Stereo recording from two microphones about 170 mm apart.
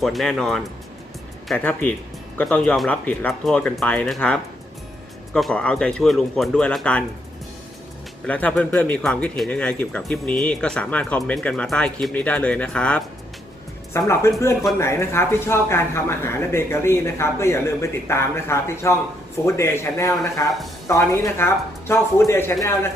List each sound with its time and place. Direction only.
0.0 s speech: centre (ahead or behind)
8.3 s speech: 10° left (ahead or behind)